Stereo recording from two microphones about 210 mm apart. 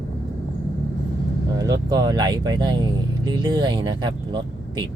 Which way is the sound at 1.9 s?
20° right (ahead or behind).